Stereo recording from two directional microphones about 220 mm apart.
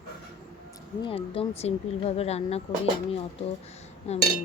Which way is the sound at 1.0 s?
25° left (ahead or behind).